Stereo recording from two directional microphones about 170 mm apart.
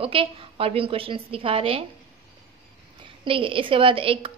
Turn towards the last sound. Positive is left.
turn(degrees=-30)  # may be behind; listen again after turning